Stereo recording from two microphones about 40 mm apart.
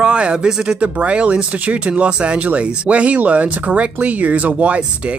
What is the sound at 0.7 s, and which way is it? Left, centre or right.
Speech, right.